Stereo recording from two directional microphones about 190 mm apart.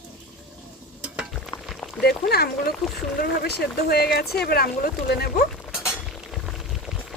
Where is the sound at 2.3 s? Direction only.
55° left (ahead or behind).